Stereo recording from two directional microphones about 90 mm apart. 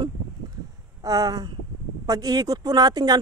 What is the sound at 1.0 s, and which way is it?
Speech, 45° right (ahead or behind).